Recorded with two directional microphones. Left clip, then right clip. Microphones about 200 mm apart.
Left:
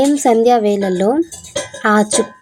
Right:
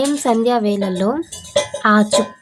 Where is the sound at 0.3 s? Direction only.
15° left (ahead or behind).